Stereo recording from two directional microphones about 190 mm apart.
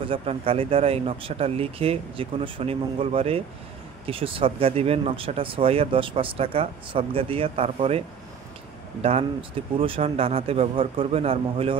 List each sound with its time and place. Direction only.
0.0 s speech: 30° right (ahead or behind)
9.8 s speech: 30° right (ahead or behind)